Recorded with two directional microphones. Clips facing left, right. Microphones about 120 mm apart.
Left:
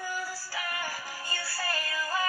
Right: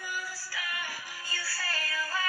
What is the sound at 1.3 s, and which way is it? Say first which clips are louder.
Music: left 3 dB; 20° left (ahead or behind).